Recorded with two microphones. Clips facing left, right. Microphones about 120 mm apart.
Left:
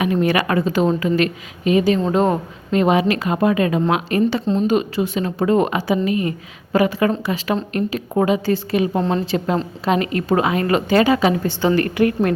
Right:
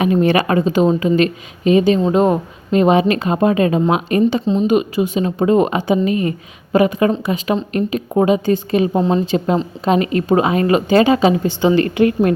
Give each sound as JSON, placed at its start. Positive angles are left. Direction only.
{"t": 0.0, "sound": "a woman's voice", "side_deg": -25}
{"t": 9.0, "sound": "speech", "side_deg": -5}
{"t": 9.2, "sound": "a woman's voice", "side_deg": -15}